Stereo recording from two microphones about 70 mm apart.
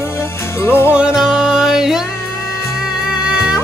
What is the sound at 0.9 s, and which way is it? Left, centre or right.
Music, centre.